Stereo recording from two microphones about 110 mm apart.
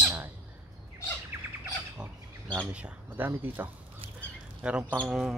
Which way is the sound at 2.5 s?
15° right (ahead or behind).